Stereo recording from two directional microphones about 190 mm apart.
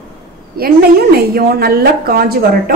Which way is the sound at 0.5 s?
50° right (ahead or behind).